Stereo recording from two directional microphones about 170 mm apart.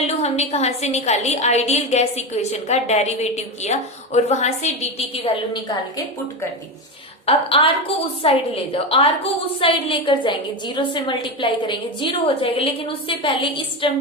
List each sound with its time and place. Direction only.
0.0 s a woman's voice: 40° left (ahead or behind)
7.3 s a woman's voice: 35° left (ahead or behind)